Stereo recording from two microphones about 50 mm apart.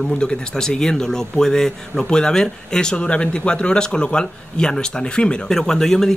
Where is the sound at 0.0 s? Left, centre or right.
Centre.